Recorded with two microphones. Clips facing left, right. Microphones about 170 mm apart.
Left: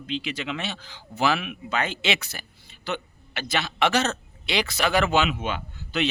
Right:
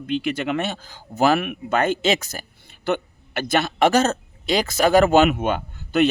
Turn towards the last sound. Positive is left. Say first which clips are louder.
# right 8 dB
turn(degrees=-50)  # may be behind; listen again after turning